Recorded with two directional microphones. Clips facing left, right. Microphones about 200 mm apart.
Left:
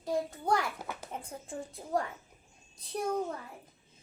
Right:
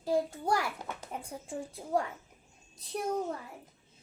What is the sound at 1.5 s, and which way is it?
Speech, 10° right (ahead or behind).